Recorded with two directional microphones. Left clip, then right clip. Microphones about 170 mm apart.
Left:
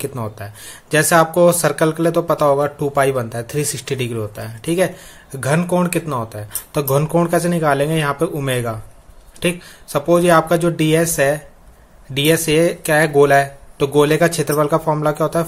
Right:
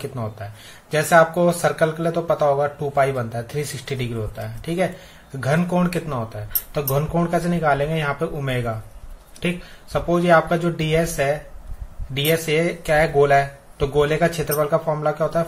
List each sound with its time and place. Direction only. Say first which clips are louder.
0.1 s speech: left 3 dB; 45° left (ahead or behind)